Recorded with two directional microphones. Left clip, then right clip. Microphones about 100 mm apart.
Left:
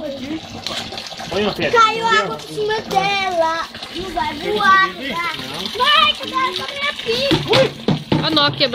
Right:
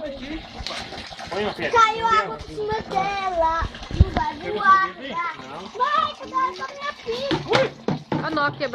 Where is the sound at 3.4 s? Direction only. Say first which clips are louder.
Left 3 dB; 35° left (ahead or behind).